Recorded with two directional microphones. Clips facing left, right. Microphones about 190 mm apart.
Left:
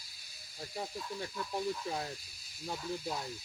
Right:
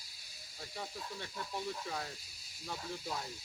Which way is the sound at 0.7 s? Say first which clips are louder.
Left 4 dB; 35° left (ahead or behind).